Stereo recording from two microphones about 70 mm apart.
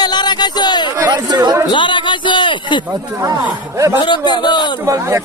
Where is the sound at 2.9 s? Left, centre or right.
Right.